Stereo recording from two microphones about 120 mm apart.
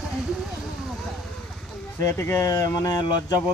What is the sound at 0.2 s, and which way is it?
Vehicle, 5° right (ahead or behind).